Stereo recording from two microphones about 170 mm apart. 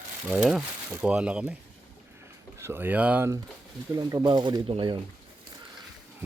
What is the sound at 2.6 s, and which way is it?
Speech, 10° right (ahead or behind).